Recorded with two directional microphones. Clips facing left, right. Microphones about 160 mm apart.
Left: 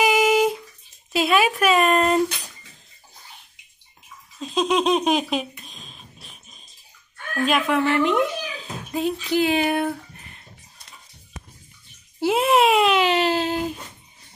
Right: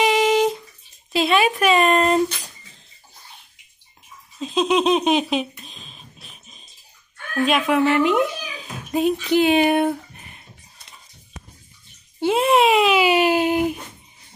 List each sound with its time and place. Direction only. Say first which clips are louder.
0.0 s bathtub: right 1 dB; 5° left (ahead or behind)
1.1 s speech: right 1 dB; 5° left (ahead or behind)
4.4 s speech: right 2 dB; centre (ahead or behind)
5.9 s a sound: even; centre (ahead or behind)
7.4 s speech: right 2 dB; centre (ahead or behind)
8.9 s speech: right 4 dB; 20° right (ahead or behind)
12.2 s speech: right 1 dB; 5° left (ahead or behind); by 13.7 s 15° right (ahead or behind)